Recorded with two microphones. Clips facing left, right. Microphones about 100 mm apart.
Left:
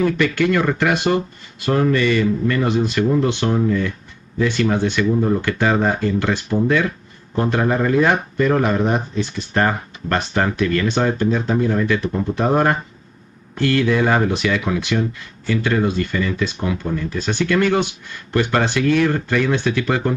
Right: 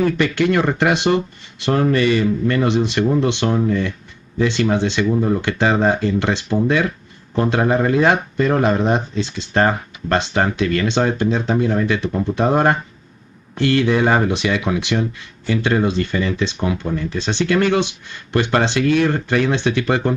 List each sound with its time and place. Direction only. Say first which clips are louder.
0.2 s speech: right 1 dB; 25° right (ahead or behind)